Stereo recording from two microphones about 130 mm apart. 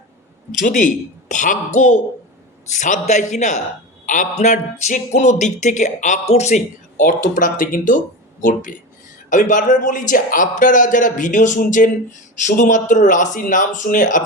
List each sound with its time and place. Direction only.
0.6 s a man's voice: 85° left
9.3 s a man's voice: 75° left (ahead or behind)